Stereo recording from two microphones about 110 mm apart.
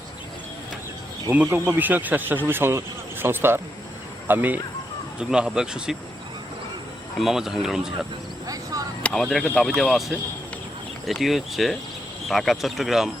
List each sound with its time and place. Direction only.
1.3 s speech: 20° right (ahead or behind); by 6.0 s 5° right (ahead or behind)
7.2 s speech: 5° right (ahead or behind)
8.4 s a sound: 35° right (ahead or behind)
9.0 s speech: 5° left (ahead or behind)